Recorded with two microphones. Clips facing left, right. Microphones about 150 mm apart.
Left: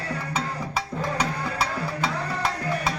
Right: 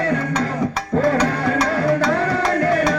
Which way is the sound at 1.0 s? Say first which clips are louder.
Right 12 dB; 90° right.